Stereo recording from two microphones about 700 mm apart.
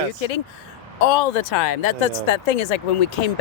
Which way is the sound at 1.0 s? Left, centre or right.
Left.